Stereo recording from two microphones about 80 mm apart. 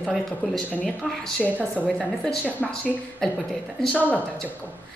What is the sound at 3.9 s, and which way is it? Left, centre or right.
Speech, centre.